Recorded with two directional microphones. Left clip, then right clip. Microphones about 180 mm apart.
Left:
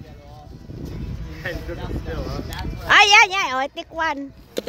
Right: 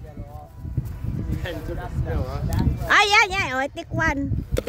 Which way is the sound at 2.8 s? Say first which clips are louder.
Left 4 dB; 10° right (ahead or behind).